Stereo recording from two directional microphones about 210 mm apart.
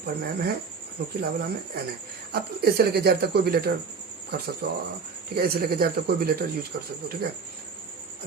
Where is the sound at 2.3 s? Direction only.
50° right (ahead or behind).